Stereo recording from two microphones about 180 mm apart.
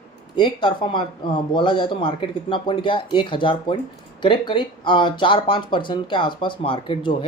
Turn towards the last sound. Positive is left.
turn(degrees=30)  # may be behind; listen again after turning